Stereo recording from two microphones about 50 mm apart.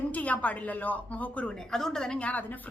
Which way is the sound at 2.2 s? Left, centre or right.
Left.